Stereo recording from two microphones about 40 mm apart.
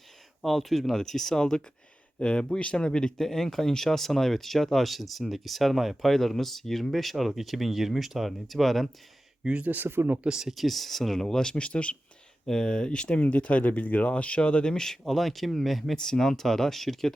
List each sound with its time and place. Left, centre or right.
0.4 s speech: centre
9.4 s speech: right
9.6 s speech: right
9.9 s speech: right
10.2 s speech: centre
10.5 s speech: centre
11.5 s speech: left
12.5 s speech: centre
15.0 s speech: centre
16.0 s speech: centre